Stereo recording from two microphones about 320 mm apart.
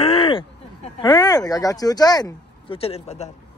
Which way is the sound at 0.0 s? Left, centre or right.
Centre.